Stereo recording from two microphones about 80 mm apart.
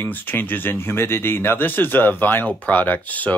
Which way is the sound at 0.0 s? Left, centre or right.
Left.